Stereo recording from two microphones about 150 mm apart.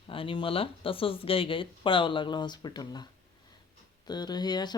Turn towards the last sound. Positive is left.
turn(degrees=30)  # may be behind; listen again after turning